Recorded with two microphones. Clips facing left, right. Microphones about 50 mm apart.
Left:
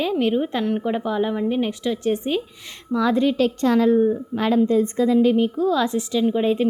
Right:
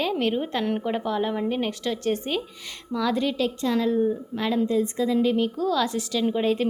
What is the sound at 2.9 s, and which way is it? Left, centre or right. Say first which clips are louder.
A woman's voice: left 5 dB; left.